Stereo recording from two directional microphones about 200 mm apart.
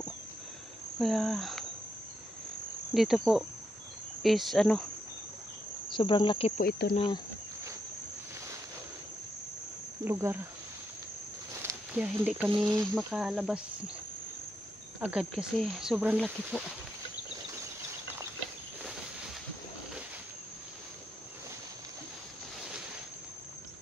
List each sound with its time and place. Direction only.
0.9 s speech: centre (ahead or behind)
2.9 s speech: centre (ahead or behind)
5.9 s cricket: 25° left (ahead or behind)
6.6 s speech: 50° left (ahead or behind)
10.0 s speech: 10° right (ahead or behind)
11.9 s speech: 5° right (ahead or behind)
12.4 s speech: 20° right (ahead or behind)
12.7 s speech: 5° right (ahead or behind)
15.0 s speech: 5° right (ahead or behind)